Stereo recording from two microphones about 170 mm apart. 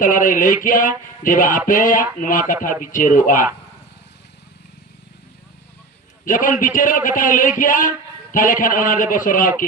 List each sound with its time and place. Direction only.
0.0 s a man's voice: 55° left (ahead or behind)
6.2 s a man's voice: 50° left (ahead or behind)